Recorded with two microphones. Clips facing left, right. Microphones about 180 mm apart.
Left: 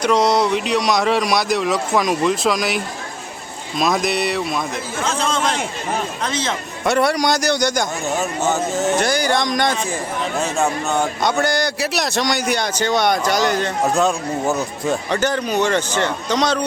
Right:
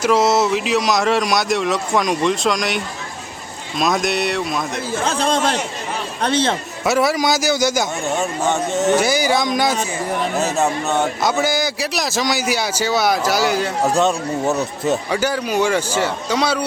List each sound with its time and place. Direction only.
0.0 s a man's voice: 5° right (ahead or behind)
5.0 s speech: 35° right (ahead or behind)
6.8 s a man's voice: 5° right (ahead or behind)